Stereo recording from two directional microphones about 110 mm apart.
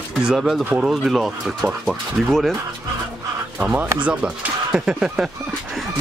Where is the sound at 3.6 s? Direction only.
10° right (ahead or behind).